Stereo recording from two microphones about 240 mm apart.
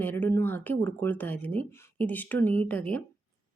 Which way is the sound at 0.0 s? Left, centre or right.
Centre.